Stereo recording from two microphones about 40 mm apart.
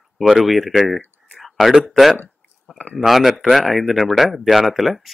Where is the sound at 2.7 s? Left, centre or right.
Left.